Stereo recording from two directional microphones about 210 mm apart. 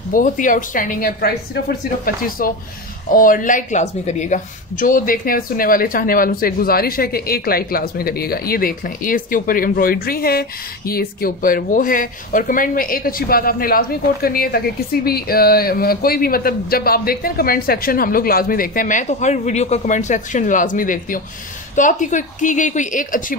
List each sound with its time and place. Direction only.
0.1 s a woman's voice: 40° left (ahead or behind)